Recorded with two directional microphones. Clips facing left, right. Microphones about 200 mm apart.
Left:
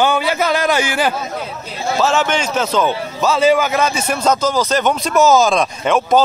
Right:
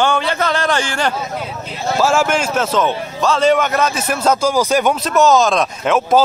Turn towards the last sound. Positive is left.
turn(degrees=-5)  # may be behind; listen again after turning